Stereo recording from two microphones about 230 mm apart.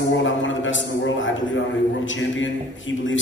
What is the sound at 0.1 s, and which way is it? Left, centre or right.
A man's voice, left.